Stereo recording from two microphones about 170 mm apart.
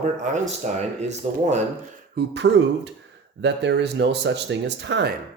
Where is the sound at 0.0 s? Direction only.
45° right (ahead or behind).